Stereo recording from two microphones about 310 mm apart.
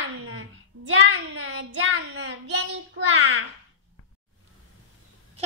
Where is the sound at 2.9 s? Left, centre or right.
Right.